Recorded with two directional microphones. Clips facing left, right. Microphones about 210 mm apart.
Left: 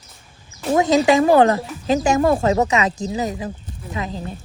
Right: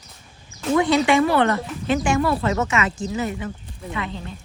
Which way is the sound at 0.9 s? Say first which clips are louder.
Left 6 dB; 40° left (ahead or behind).